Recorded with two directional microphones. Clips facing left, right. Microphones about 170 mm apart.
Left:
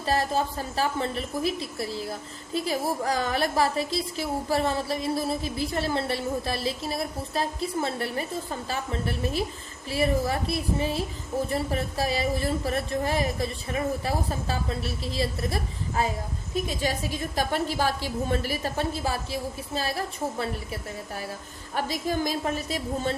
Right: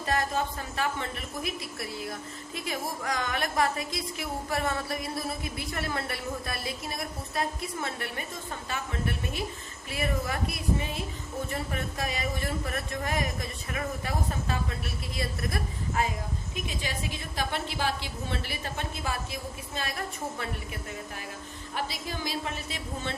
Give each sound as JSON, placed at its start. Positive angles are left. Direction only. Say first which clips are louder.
{"t": 0.0, "sound": "a woman's voice", "louder": "left 3 dB", "side_deg": 30}
{"t": 21.8, "sound": "a woman's voice", "louder": "left 7 dB", "side_deg": 45}